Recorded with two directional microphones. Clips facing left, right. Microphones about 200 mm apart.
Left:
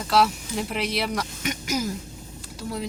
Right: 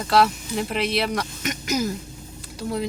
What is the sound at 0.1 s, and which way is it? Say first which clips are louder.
Speech: right 2 dB; 5° left (ahead or behind).